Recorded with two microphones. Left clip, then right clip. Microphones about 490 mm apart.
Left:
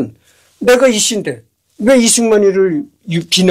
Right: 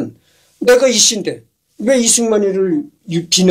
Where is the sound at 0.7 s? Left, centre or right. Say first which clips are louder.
Even; left.